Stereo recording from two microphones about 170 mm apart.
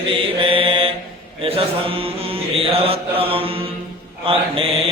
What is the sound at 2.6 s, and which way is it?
Mantra, 35° right (ahead or behind).